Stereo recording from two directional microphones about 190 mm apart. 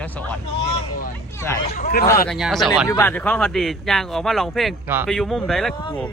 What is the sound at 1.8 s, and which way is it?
Speech, 50° left (ahead or behind).